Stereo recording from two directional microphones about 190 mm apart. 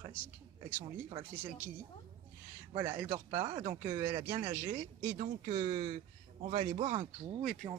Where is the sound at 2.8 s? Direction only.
10° right (ahead or behind).